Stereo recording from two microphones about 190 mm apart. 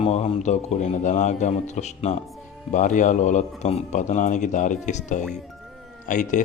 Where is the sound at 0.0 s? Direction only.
35° left (ahead or behind).